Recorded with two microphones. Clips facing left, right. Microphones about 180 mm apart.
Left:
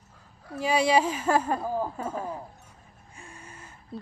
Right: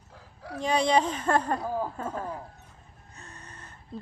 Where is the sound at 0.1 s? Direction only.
80° right.